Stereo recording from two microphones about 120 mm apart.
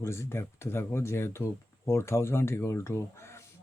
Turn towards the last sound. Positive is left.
turn(degrees=20)  # may be behind; listen again after turning